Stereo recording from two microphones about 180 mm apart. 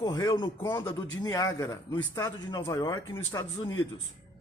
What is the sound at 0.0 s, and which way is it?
A man's voice, 20° left (ahead or behind).